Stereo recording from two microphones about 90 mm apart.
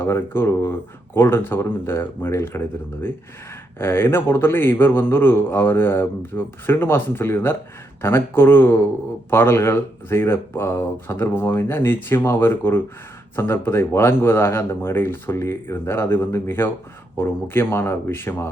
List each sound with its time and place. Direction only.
0.0 s a man's voice: 25° left (ahead or behind)